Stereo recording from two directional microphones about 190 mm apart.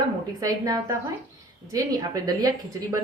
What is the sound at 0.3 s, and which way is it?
A woman's voice, 20° right (ahead or behind).